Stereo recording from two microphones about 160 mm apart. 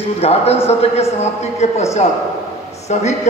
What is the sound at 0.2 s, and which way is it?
A man's voice, 40° left (ahead or behind).